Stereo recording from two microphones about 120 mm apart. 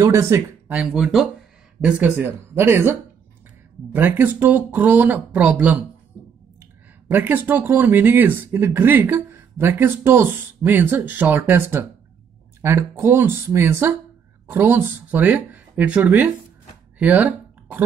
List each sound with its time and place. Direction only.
0.0 s speech: 20° right (ahead or behind)
0.7 s speech: centre (ahead or behind)
17.0 s a sound: 15° right (ahead or behind)